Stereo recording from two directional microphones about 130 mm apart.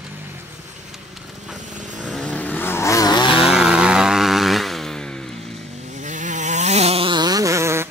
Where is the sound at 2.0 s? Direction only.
5° left (ahead or behind); by 3.4 s 40° left (ahead or behind).